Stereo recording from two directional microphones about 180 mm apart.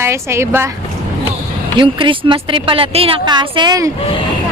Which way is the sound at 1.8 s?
30° right (ahead or behind).